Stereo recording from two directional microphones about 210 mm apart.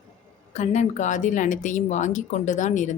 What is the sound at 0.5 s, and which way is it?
Speech, 35° left (ahead or behind).